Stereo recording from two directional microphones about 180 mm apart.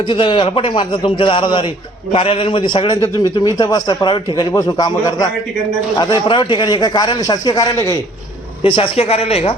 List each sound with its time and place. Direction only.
0.0 s a man's voice: 25° left (ahead or behind)
8.6 s a woman's voice: 30° left (ahead or behind)